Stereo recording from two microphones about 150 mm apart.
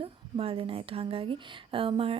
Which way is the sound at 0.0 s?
40° right (ahead or behind).